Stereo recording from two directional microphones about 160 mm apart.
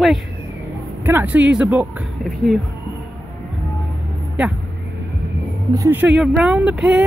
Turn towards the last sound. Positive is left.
turn(degrees=-5)  # may be behind; listen again after turning